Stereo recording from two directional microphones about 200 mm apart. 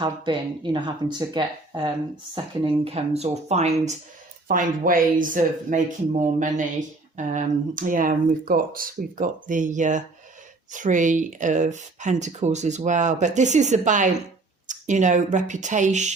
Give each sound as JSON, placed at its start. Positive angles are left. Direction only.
{"t": 0.0, "sound": "speech", "side_deg": -25}
{"t": 4.4, "sound": "speech", "side_deg": -45}